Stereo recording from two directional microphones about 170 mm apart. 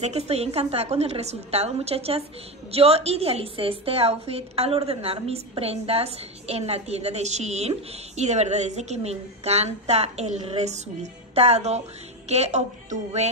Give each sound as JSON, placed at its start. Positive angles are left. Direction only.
{"t": 0.0, "sound": "a woman's voice", "side_deg": -40}